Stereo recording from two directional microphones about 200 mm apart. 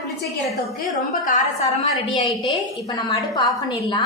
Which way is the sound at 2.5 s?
20° left (ahead or behind).